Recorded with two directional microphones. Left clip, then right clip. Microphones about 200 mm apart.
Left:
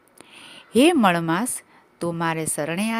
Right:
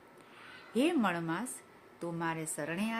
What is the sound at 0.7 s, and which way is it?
A woman's voice, 50° left (ahead or behind).